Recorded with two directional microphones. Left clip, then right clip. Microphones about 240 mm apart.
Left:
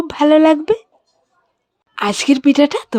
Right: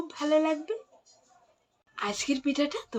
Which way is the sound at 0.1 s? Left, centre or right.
Left.